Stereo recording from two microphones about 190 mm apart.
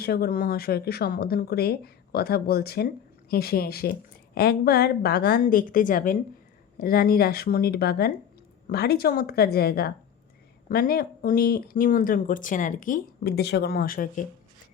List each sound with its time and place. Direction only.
0.0 s speech: 55° left (ahead or behind)